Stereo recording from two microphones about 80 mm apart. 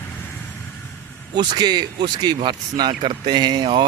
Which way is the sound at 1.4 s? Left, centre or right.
Right.